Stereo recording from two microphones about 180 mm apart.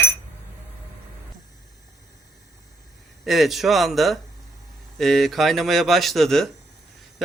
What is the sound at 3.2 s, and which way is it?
Speech, centre (ahead or behind).